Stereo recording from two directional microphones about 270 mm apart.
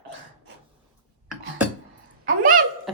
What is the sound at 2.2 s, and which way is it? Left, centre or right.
Hiccup, right.